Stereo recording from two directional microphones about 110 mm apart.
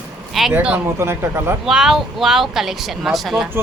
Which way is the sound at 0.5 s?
10° right (ahead or behind).